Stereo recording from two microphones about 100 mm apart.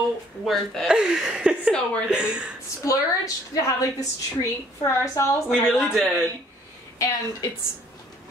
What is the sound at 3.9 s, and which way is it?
A woman's voice, 35° left (ahead or behind).